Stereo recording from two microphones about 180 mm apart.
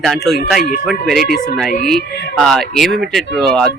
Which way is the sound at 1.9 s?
Centre (ahead or behind).